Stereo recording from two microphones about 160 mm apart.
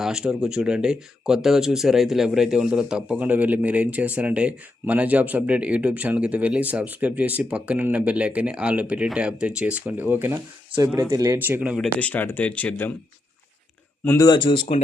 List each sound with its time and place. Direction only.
0.0 s speech: 5° right (ahead or behind)
11.9 s speech: 10° left (ahead or behind)
14.0 s speech: 15° left (ahead or behind)
14.3 s speech: 30° left (ahead or behind)